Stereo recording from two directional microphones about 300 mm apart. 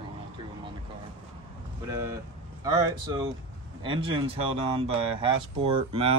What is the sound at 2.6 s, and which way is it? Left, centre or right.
Speech, centre.